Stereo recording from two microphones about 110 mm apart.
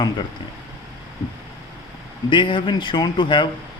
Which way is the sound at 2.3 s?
50° left (ahead or behind).